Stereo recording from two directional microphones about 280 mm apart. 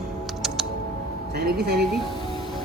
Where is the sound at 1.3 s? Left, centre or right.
Right.